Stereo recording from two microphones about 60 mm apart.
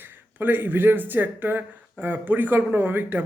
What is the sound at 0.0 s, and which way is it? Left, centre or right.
Speech, right.